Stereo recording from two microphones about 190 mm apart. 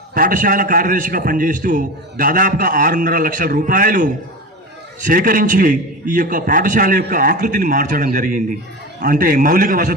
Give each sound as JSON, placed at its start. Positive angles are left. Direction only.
{"t": 0.1, "sound": "a man's voice", "side_deg": -50}